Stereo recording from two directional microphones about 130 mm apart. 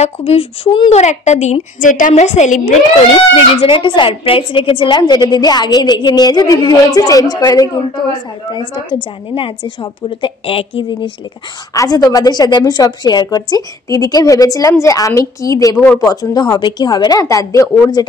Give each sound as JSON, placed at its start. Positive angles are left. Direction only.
{"t": 0.0, "sound": "a woman's voice", "side_deg": 50}
{"t": 3.3, "sound": "a woman's voice", "side_deg": 40}
{"t": 11.7, "sound": "a woman's voice", "side_deg": 25}